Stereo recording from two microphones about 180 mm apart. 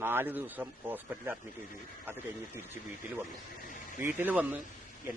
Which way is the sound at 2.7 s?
10° right (ahead or behind).